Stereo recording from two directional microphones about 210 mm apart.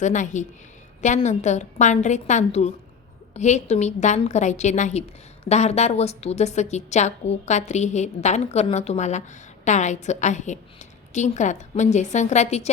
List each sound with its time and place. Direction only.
0.0 s a woman's voice: 35° left (ahead or behind)